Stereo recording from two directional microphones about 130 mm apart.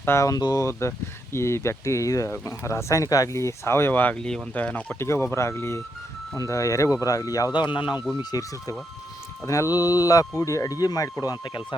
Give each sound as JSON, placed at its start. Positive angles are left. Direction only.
{"t": 0.0, "sound": "speech", "side_deg": 20}